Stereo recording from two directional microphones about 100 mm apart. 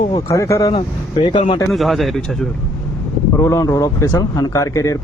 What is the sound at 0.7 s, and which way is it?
Speech, 60° left (ahead or behind).